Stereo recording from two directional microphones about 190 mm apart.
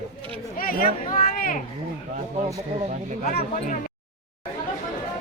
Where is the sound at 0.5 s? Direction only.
50° left (ahead or behind).